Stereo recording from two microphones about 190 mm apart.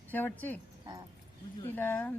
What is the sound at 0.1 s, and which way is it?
Speech, 10° left (ahead or behind).